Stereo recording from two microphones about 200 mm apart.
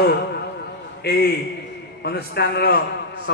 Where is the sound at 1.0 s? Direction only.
55° left (ahead or behind).